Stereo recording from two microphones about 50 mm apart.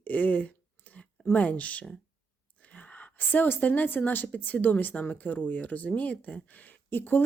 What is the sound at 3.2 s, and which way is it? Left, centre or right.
Speech, left.